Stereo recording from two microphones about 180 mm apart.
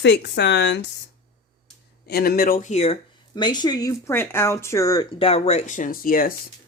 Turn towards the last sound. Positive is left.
turn(degrees=50)  # may be behind; listen again after turning